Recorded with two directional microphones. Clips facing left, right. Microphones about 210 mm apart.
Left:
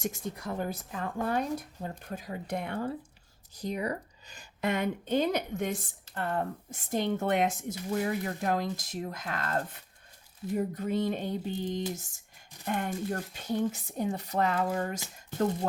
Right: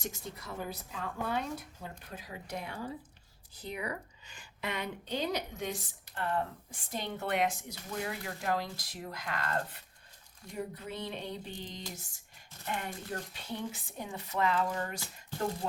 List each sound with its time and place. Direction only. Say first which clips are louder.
0.1 s a woman's voice: left 7 dB; 50° left (ahead or behind)
3.5 s a woman's voice: left 6 dB; 40° left (ahead or behind)
10.5 s a woman's voice: left 9 dB; 45° left (ahead or behind)
14.8 s speech: left 5 dB; 20° left (ahead or behind)